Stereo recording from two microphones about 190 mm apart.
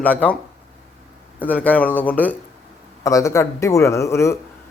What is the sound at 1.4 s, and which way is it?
A man's voice, 10° left (ahead or behind).